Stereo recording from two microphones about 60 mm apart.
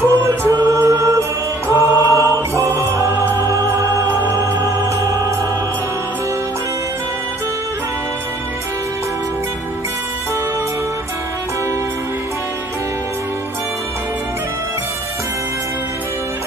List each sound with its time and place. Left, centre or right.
0.0 s music: right
0.7 s mantra: right
1.7 s music: right
3.3 s music: right
3.7 s music: right